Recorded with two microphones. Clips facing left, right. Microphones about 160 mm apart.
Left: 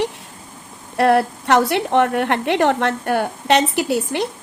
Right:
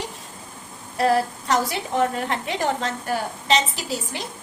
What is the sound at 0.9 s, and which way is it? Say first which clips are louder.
A woman's voice: left 5 dB; 65° left (ahead or behind).